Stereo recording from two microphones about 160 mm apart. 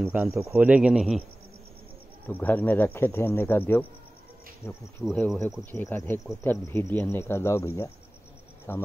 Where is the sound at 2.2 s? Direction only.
10° left (ahead or behind).